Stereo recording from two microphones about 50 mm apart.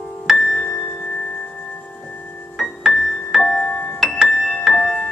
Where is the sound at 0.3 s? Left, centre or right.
Centre.